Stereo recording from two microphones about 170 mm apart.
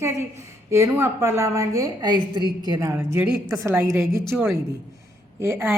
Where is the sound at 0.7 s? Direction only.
15° right (ahead or behind).